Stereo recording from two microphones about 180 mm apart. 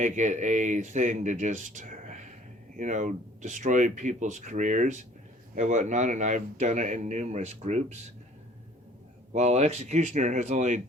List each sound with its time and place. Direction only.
0.0 s speech: 45° right (ahead or behind)
9.3 s speech: 40° right (ahead or behind)